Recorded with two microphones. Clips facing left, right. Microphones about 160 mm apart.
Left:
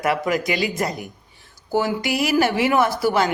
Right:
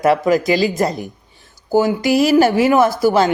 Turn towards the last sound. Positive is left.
turn(degrees=-25)  # may be behind; listen again after turning